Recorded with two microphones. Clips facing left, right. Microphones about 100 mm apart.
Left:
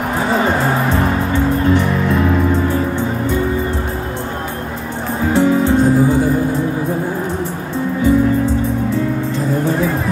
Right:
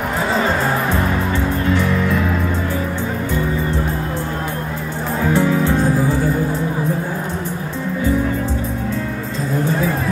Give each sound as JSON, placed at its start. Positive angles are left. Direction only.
{"t": 5.3, "sound": "music", "side_deg": 20}